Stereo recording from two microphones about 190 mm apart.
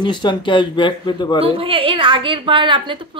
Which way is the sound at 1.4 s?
30° right (ahead or behind).